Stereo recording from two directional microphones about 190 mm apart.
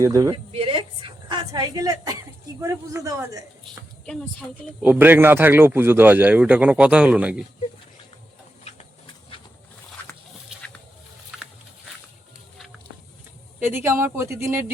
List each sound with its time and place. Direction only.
0.0 s a man's voice: 15° right (ahead or behind)
0.5 s a sound: 30° right (ahead or behind)
2.6 s a man's voice: 15° right (ahead or behind)
4.8 s a man's voice: 10° right (ahead or behind)
11.3 s a sound: centre (ahead or behind)
13.6 s a man's voice: 10° right (ahead or behind)